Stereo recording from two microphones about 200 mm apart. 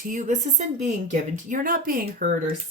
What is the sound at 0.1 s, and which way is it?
Speech, 35° right (ahead or behind).